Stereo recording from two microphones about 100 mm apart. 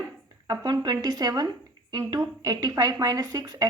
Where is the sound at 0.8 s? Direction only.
40° right (ahead or behind).